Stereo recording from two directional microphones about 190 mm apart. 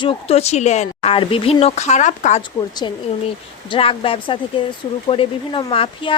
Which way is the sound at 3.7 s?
30° left (ahead or behind).